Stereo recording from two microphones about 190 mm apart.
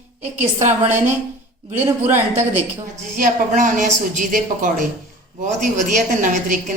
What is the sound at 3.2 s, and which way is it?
A woman's voice, 40° right (ahead or behind).